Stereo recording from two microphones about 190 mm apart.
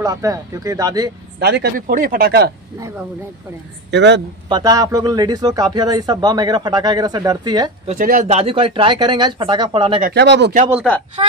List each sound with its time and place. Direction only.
0.0 s a man's voice: 20° right (ahead or behind)
1.4 s speech: 60° right (ahead or behind)
3.9 s a man's voice: 70° right (ahead or behind)
4.5 s a man's voice: 20° right (ahead or behind)
8.0 s a man's voice: 45° right (ahead or behind); by 10.0 s 30° right (ahead or behind)
10.0 s speech: 65° right (ahead or behind)
11.2 s a man's voice: 30° right (ahead or behind)